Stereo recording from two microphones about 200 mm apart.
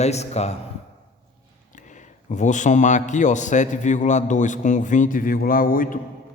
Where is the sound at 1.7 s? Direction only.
40° left (ahead or behind).